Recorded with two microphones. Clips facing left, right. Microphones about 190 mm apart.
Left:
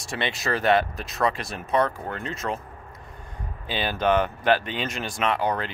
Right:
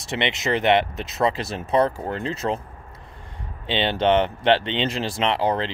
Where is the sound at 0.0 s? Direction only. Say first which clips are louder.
Right 4 dB; 20° right (ahead or behind).